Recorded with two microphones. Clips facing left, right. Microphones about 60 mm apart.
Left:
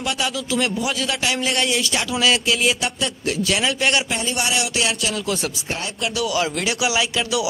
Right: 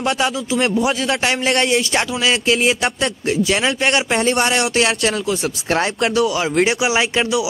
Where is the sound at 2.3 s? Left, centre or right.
Right.